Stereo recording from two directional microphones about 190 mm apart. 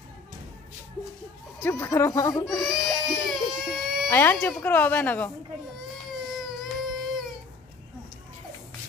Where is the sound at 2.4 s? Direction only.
Centre (ahead or behind).